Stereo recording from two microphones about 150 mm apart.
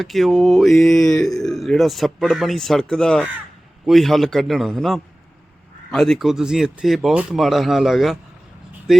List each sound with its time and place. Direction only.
0.0 s speech: centre (ahead or behind)